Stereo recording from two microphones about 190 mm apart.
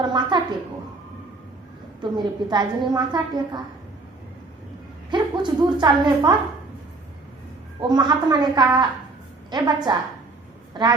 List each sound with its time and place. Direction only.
0.0 s a woman's voice: 25° right (ahead or behind)
2.0 s a woman's voice: 25° right (ahead or behind)
5.1 s a woman's voice: 25° right (ahead or behind)
7.8 s a woman's voice: 25° right (ahead or behind)